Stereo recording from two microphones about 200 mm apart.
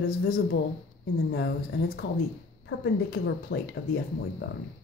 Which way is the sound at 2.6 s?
55° left (ahead or behind).